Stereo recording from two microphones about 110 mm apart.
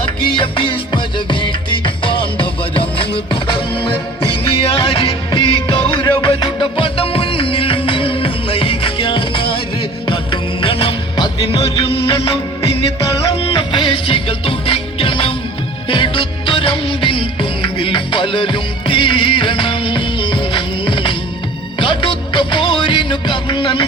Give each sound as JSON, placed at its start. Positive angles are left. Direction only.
{"t": 0.3, "sound": "music", "side_deg": 50}
{"t": 10.6, "sound": "music", "side_deg": 55}
{"t": 11.8, "sound": "music of bollywood", "side_deg": 60}
{"t": 13.5, "sound": "music", "side_deg": 50}
{"t": 15.9, "sound": "music of bollywood", "side_deg": 50}
{"t": 21.8, "sound": "music", "side_deg": 50}